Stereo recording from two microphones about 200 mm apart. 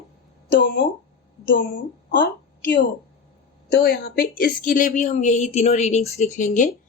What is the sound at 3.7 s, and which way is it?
Speech, 50° left (ahead or behind).